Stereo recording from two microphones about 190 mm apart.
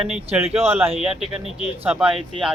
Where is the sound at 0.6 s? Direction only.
10° right (ahead or behind).